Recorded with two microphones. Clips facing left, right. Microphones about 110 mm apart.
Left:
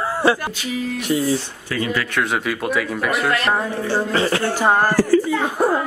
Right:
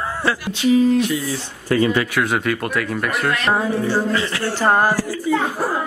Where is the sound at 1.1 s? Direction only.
45° left (ahead or behind).